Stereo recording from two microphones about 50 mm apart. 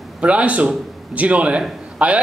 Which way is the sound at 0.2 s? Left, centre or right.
Right.